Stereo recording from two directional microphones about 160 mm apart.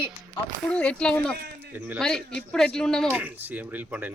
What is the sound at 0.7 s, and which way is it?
Speech, 5° left (ahead or behind).